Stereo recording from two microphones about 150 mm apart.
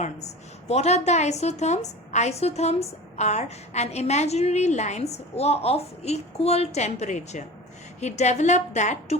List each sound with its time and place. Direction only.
0.7 s a woman's voice: 45° left (ahead or behind)